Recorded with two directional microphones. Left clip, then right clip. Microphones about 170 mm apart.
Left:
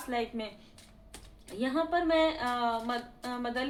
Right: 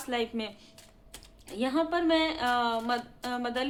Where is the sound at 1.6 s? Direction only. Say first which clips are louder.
Right 1 dB; 30° right (ahead or behind).